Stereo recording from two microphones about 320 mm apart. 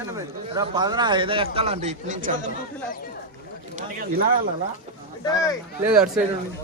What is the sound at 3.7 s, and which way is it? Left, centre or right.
Speech, right.